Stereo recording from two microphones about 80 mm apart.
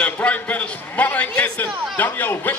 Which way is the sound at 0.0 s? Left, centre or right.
Centre.